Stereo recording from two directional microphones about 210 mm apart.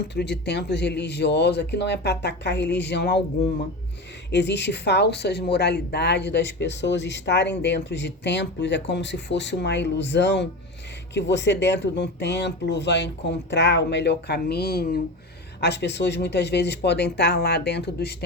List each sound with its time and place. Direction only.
0.1 s a man's voice: 55° left (ahead or behind)
4.3 s a man's voice: 55° left (ahead or behind)